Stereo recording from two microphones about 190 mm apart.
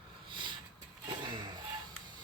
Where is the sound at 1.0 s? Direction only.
25° right (ahead or behind).